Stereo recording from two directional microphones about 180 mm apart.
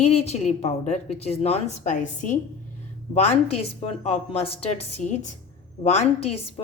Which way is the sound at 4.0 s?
35° left (ahead or behind).